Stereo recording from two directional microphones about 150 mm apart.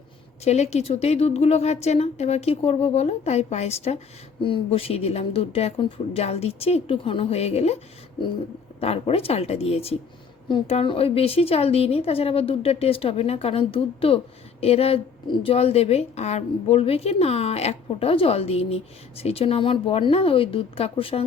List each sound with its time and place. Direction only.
0.4 s a woman's voice: 45° left (ahead or behind)
8.8 s a woman's voice: 40° left (ahead or behind)